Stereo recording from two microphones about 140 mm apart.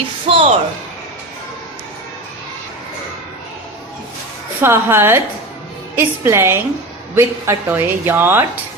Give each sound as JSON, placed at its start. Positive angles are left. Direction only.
{"t": 0.3, "sound": "speech", "side_deg": -40}
{"t": 4.6, "sound": "speech", "side_deg": -20}